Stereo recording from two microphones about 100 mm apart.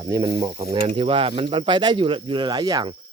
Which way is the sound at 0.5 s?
65° right (ahead or behind).